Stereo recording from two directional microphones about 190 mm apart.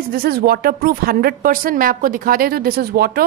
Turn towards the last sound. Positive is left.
turn(degrees=-55)  # may be behind; listen again after turning